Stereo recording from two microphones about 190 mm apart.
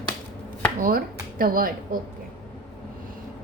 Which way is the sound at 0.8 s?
50° right (ahead or behind).